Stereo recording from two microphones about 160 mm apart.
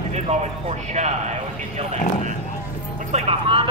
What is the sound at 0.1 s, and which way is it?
Speech, 45° right (ahead or behind).